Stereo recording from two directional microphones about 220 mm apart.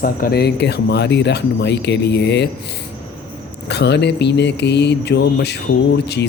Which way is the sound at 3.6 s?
50° left (ahead or behind).